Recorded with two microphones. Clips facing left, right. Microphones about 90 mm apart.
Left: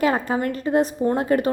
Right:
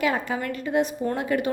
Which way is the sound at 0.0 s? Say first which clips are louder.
Left 4 dB; 40° left (ahead or behind).